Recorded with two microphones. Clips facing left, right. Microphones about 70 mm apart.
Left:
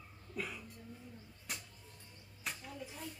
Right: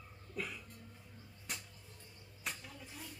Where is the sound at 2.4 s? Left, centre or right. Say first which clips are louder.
Left 2 dB; centre.